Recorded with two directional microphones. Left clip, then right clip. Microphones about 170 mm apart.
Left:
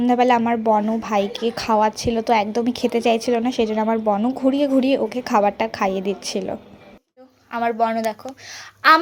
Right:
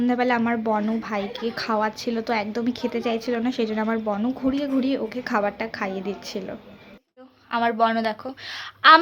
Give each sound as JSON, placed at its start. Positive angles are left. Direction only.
{"t": 0.0, "sound": "speech", "side_deg": 20}
{"t": 1.0, "sound": "a woman's voice", "side_deg": 25}
{"t": 7.5, "sound": "a woman's voice", "side_deg": 0}